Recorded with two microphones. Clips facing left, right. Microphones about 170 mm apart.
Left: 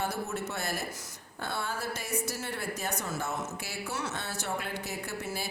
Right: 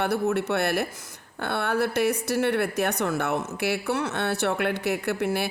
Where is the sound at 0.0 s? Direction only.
65° right (ahead or behind).